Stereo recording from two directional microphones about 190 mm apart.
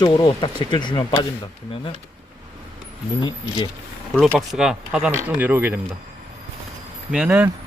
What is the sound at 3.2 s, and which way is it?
Speech, 25° left (ahead or behind).